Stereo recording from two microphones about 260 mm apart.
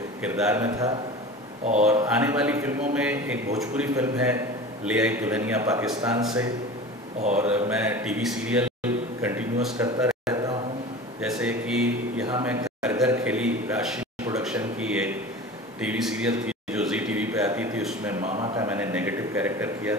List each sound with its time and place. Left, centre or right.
0.2 s a man's voice: centre
7.2 s speech: right
7.4 s a man's voice: centre
12.3 s a sound: centre
18.4 s a man's voice: centre